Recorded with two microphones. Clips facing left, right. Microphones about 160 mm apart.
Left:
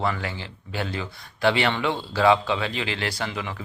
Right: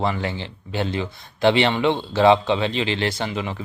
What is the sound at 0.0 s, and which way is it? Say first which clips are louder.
Speech: right 3 dB; 25° right (ahead or behind).